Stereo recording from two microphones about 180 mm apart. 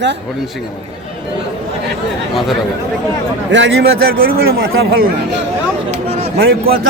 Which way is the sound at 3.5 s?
75° right (ahead or behind).